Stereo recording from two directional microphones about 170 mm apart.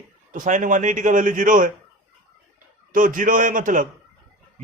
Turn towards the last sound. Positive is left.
turn(degrees=-50)  # may be behind; listen again after turning